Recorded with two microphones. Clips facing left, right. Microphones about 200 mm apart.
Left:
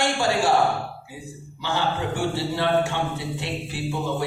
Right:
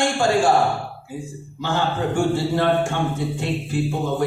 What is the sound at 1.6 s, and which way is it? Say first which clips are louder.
Speech: right 3 dB; 50° right (ahead or behind).